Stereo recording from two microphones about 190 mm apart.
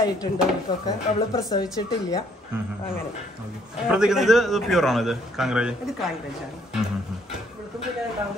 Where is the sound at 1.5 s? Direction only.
20° left (ahead or behind).